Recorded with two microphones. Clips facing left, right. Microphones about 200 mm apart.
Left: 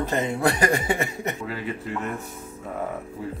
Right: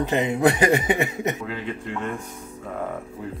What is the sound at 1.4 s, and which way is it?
Speech, 5° left (ahead or behind).